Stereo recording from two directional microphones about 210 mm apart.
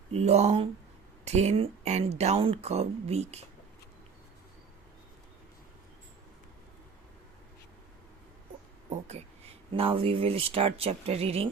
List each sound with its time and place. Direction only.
0.1 s speech: 30° right (ahead or behind)
9.7 s speech: 25° right (ahead or behind)